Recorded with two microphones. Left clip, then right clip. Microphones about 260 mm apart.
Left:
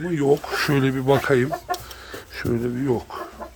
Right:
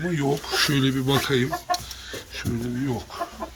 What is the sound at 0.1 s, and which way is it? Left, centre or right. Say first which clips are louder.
Speech: left 7 dB; centre.